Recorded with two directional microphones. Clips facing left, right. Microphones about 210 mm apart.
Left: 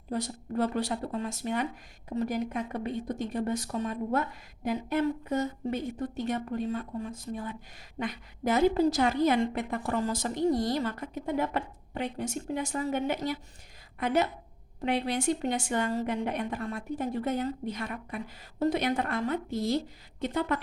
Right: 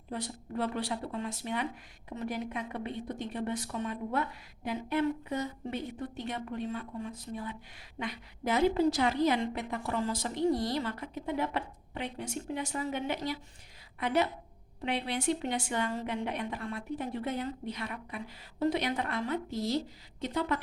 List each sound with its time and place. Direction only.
0.1 s a woman's voice: 40° left (ahead or behind)